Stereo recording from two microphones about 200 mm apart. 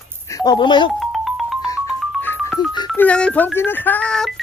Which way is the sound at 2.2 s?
10° left (ahead or behind).